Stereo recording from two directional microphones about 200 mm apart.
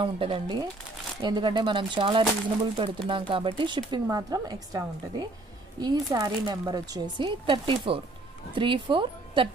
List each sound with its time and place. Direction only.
0.0 s speech: 25° right (ahead or behind)